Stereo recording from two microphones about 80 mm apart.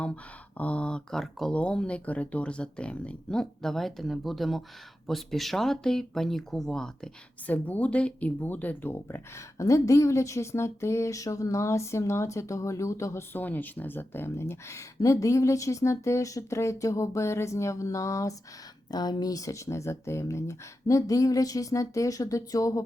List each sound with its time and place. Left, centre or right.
0.5 s speech: centre
7.4 s speech: left
9.6 s speech: left
13.3 s speech: left
18.9 s speech: left